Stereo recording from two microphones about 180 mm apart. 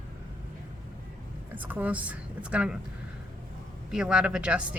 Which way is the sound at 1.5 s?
10° right (ahead or behind).